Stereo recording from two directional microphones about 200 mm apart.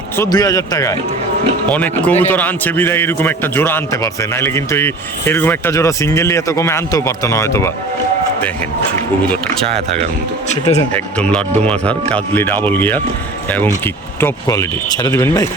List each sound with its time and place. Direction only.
0.2 s speech: 20° left (ahead or behind)
10.8 s speech: 5° left (ahead or behind)